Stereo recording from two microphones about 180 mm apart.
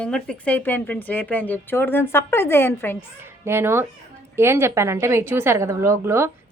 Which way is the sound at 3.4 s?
15° right (ahead or behind).